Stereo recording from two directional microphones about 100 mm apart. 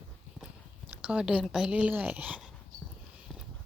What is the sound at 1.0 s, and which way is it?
Speech, 10° right (ahead or behind).